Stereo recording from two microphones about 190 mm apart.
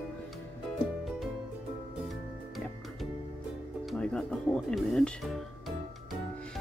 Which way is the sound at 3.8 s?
5° left (ahead or behind).